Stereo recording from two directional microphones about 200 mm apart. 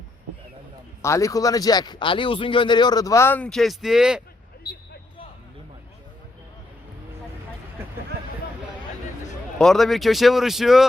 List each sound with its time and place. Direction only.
1.0 s speech: 15° left (ahead or behind); by 4.2 s 5° right (ahead or behind)
9.6 s speech: centre (ahead or behind)